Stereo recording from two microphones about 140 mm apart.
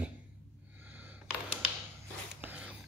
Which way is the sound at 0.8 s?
15° right (ahead or behind).